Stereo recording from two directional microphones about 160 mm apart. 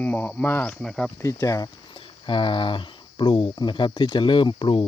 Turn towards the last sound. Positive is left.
turn(degrees=30)  # may be behind; listen again after turning